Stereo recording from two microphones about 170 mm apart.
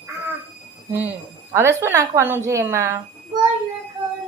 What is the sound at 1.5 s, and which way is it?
Speech, 15° right (ahead or behind).